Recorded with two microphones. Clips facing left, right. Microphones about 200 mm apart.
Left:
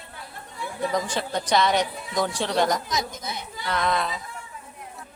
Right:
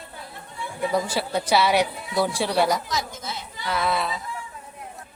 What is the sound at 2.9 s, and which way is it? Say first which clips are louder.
Speech: even; 20° left (ahead or behind).